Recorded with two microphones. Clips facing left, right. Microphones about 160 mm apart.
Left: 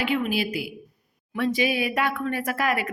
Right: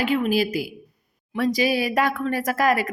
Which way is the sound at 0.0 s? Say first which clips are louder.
Right 4 dB; 40° right (ahead or behind).